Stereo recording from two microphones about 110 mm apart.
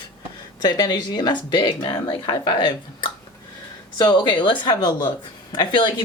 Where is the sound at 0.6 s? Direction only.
40° left (ahead or behind).